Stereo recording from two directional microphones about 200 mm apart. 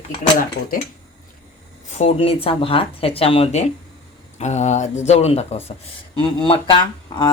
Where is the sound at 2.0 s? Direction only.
30° left (ahead or behind).